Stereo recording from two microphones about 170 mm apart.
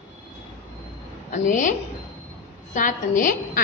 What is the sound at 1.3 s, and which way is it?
A woman's voice, 45° left (ahead or behind).